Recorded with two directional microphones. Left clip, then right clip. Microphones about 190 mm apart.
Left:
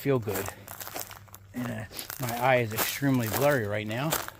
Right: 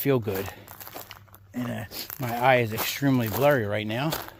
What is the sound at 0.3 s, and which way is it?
Crumpling, 5° right (ahead or behind).